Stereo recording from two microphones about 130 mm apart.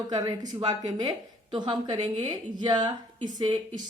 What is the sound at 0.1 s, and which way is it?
Speech, 30° right (ahead or behind).